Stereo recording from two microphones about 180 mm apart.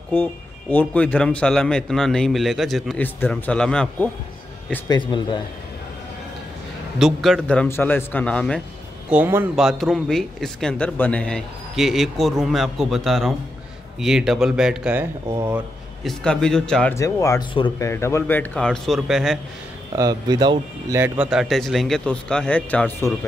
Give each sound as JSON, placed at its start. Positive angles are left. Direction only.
{"t": 0.1, "sound": "speech", "side_deg": 10}
{"t": 4.8, "sound": "speech", "side_deg": 25}
{"t": 7.0, "sound": "a man's voice", "side_deg": 0}
{"t": 9.1, "sound": "speech", "side_deg": -10}
{"t": 16.0, "sound": "speech", "side_deg": 0}
{"t": 16.9, "sound": "a man's voice", "side_deg": 15}
{"t": 20.0, "sound": "speech", "side_deg": -20}
{"t": 21.0, "sound": "speech", "side_deg": -5}